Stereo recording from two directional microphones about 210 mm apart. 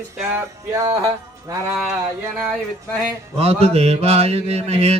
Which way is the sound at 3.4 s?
30° right (ahead or behind).